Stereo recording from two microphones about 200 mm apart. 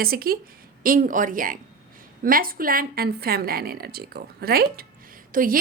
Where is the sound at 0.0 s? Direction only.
50° right (ahead or behind).